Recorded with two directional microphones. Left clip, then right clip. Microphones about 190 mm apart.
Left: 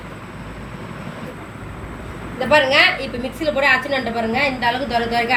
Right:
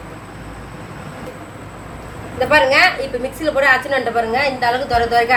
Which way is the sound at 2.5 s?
40° right (ahead or behind).